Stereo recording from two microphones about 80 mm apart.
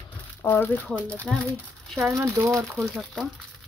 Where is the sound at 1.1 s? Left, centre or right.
Centre.